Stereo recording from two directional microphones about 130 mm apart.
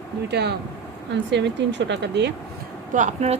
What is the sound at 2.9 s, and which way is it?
Speech, 65° right (ahead or behind).